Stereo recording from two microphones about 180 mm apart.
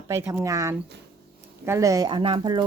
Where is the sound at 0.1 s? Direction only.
15° right (ahead or behind).